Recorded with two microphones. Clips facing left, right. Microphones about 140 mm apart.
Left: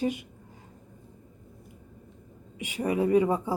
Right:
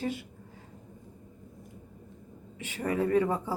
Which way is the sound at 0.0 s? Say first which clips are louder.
Left 4 dB; 15° left (ahead or behind).